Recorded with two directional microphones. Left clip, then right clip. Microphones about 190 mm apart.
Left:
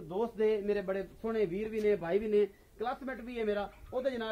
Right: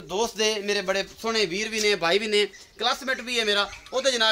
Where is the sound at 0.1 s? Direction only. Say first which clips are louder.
Right 6 dB; 55° right (ahead or behind).